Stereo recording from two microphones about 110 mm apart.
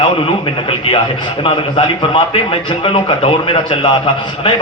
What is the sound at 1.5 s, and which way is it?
A man's voice, 50° left (ahead or behind).